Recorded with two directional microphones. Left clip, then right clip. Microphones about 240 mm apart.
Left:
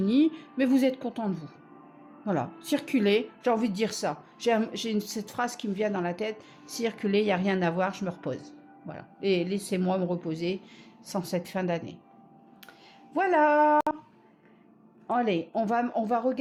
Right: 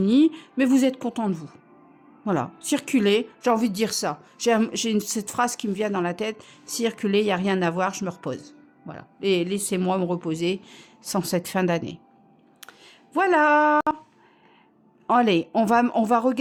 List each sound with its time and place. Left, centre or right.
0.0 s a woman's voice: right
13.1 s speech: right
15.0 s speech: right